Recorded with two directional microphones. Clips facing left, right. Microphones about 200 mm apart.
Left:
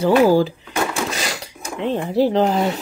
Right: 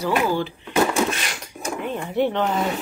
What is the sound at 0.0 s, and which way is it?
Speech, 35° left (ahead or behind).